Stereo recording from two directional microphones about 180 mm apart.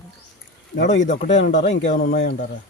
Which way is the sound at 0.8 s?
90° left.